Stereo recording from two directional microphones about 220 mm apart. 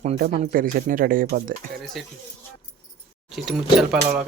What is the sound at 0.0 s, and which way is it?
Speech, 35° right (ahead or behind).